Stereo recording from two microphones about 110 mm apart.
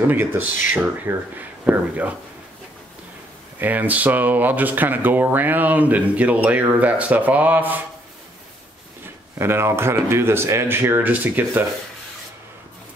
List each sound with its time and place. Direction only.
0.0 s speech: 20° right (ahead or behind)
3.5 s speech: 15° right (ahead or behind)
9.0 s speech: 20° right (ahead or behind)